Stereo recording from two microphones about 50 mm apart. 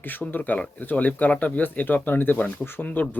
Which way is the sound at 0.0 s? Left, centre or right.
Left.